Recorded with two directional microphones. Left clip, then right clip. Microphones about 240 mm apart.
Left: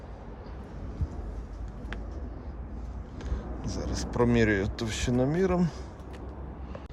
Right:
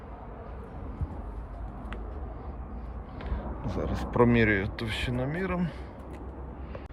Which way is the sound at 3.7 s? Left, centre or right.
Centre.